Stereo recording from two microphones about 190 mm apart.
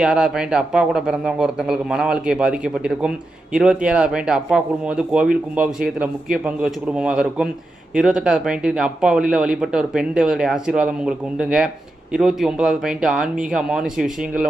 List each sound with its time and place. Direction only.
0.0 s speech: 5° right (ahead or behind)